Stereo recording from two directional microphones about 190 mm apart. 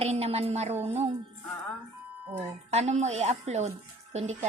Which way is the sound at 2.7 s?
35° right (ahead or behind).